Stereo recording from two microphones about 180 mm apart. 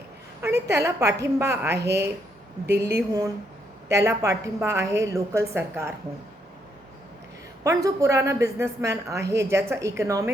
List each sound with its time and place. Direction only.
0.4 s a woman's voice: 15° right (ahead or behind)
7.6 s a woman's voice: 20° right (ahead or behind)